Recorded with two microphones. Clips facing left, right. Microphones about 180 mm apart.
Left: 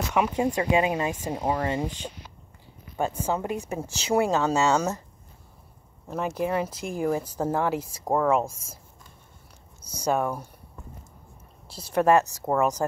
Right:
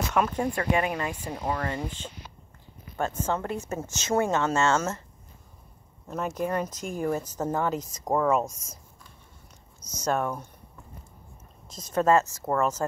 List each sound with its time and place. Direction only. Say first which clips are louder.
0.1 s speech: left 3 dB; 10° left (ahead or behind)
6.1 s speech: left 2 dB; 10° left (ahead or behind)
9.9 s speech: left 2 dB; 10° left (ahead or behind)
11.9 s speech: left 2 dB; 15° left (ahead or behind)